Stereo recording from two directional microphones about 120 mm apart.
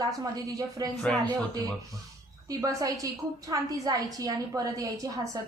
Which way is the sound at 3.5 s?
30° right (ahead or behind).